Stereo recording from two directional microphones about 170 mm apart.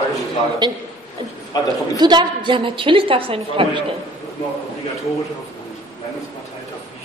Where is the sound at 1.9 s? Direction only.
25° right (ahead or behind).